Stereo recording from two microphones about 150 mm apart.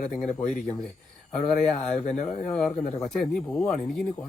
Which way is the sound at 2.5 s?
5° left (ahead or behind).